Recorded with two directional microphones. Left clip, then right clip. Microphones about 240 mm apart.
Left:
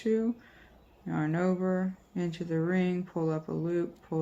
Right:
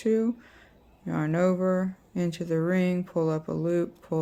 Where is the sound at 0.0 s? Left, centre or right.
Right.